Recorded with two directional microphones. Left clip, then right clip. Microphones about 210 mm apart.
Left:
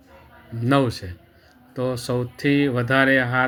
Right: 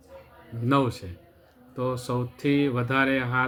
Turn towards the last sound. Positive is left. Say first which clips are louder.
# left 6 dB
turn(degrees=25)  # may be behind; listen again after turning